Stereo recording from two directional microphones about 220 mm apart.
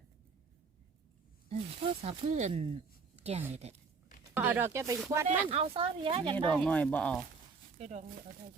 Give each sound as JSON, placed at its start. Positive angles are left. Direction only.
{"t": 2.0, "sound": "speech", "side_deg": -30}
{"t": 4.4, "sound": "speech", "side_deg": -10}
{"t": 5.3, "sound": "speech", "side_deg": -30}
{"t": 6.3, "sound": "speech", "side_deg": 5}
{"t": 7.8, "sound": "speech", "side_deg": -30}